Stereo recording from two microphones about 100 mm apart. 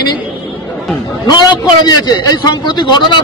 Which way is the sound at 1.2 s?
45° left (ahead or behind).